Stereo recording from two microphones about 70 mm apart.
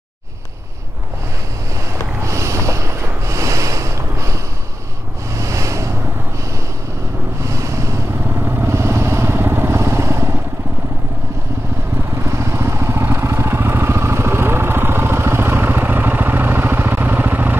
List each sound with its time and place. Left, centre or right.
2.2 s snort: right
5.4 s a sound: right
7.4 s vehicle: right
12.2 s vehicle: right